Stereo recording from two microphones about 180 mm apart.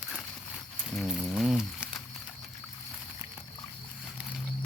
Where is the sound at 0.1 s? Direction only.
Centre (ahead or behind).